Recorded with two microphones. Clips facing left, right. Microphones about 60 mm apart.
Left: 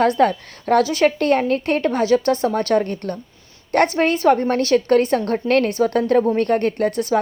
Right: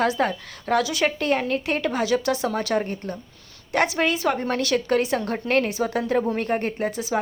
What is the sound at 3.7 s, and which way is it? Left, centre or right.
A woman's voice, left.